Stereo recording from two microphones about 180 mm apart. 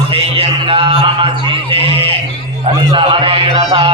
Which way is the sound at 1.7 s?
30° right (ahead or behind).